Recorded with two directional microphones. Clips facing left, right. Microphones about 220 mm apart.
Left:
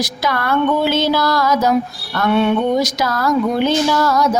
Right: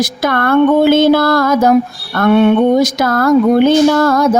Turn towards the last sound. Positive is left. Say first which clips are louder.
# right 5 dB
turn(degrees=-55)  # may be behind; listen again after turning